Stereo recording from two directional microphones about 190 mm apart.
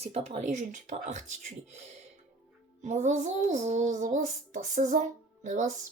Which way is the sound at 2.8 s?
40° right (ahead or behind).